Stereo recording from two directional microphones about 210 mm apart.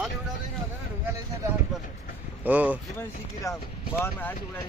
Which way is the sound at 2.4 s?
5° right (ahead or behind).